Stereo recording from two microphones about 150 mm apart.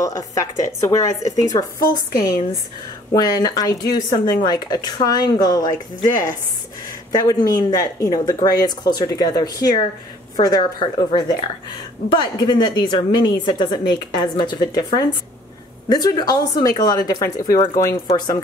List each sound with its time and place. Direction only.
0.0 s speech: 25° left (ahead or behind)
3.1 s speech: 25° left (ahead or behind)